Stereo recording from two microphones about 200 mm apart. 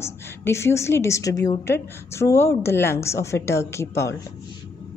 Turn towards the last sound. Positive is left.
turn(degrees=15)  # may be behind; listen again after turning